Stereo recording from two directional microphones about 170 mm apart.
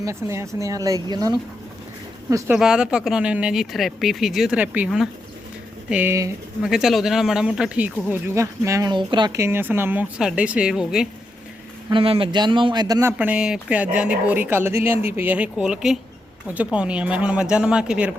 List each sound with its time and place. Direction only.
0.0 s speech: 15° right (ahead or behind)
2.6 s speech: 5° right (ahead or behind)
6.6 s speech: 5° right (ahead or behind)
11.9 s speech: 30° right (ahead or behind); by 18.1 s 5° right (ahead or behind)